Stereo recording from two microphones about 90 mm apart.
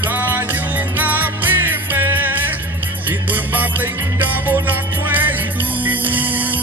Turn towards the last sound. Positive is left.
turn(degrees=-20)  # may be behind; listen again after turning